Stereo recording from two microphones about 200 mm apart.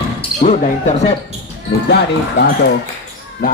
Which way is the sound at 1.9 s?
55° left (ahead or behind).